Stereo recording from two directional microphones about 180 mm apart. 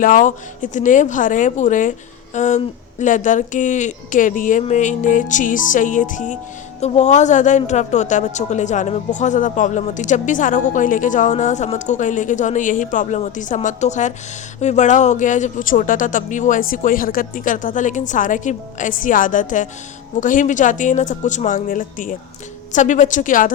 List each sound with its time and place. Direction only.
0.0 s a woman's voice: 50° left (ahead or behind)